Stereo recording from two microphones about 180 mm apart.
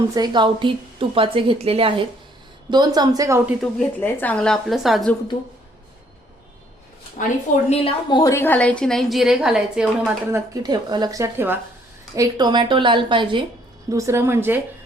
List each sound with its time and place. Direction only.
0.0 s a woman's voice: 20° right (ahead or behind)
3.6 s a woman's voice: 5° left (ahead or behind)
7.2 s a woman's voice: 50° left (ahead or behind)
7.7 s a woman's voice: 30° left (ahead or behind)
8.2 s a woman's voice: 15° left (ahead or behind); by 10.4 s 5° right (ahead or behind)
10.5 s a woman's voice: 20° right (ahead or behind)
13.9 s a woman's voice: 15° right (ahead or behind)